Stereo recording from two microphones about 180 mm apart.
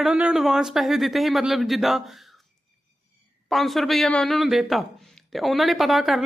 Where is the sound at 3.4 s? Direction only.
Centre (ahead or behind).